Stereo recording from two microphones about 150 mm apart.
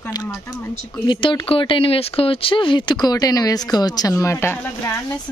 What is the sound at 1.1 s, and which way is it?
Speech, 35° left (ahead or behind).